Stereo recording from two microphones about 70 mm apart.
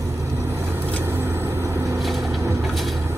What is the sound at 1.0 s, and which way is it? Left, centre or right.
Vehicle, right.